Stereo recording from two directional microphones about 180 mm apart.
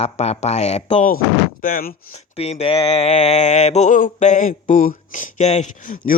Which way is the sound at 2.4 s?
35° left (ahead or behind).